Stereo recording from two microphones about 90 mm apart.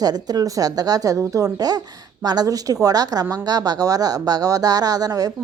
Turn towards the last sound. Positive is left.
turn(degrees=-45)  # may be behind; listen again after turning